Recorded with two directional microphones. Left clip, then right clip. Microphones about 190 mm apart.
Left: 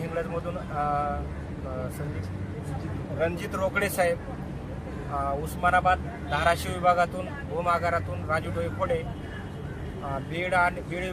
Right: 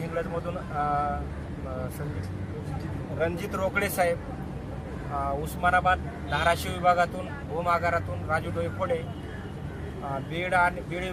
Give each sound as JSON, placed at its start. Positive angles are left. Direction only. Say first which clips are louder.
{"t": 0.2, "sound": "speech", "louder": "right 1 dB", "side_deg": 0}
{"t": 3.2, "sound": "speech", "louder": "left 1 dB", "side_deg": 0}
{"t": 5.1, "sound": "speech", "louder": "left 1 dB", "side_deg": -5}
{"t": 10.1, "sound": "speech", "louder": "even", "side_deg": 0}